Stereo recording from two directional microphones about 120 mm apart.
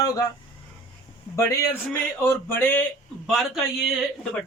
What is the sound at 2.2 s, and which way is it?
Speech, 20° left (ahead or behind).